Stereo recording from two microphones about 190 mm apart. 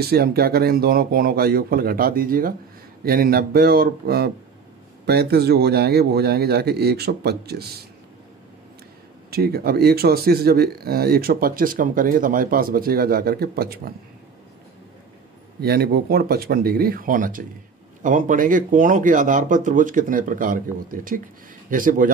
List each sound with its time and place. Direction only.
0.0 s a man's voice: 55° right (ahead or behind)
9.3 s speech: 55° right (ahead or behind)
15.6 s speech: 55° right (ahead or behind)